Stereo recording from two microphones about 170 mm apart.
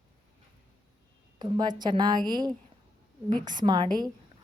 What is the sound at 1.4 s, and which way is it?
A woman's voice, 25° right (ahead or behind).